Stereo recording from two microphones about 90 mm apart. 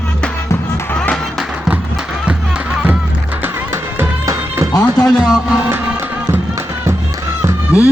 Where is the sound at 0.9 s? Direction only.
15° left (ahead or behind).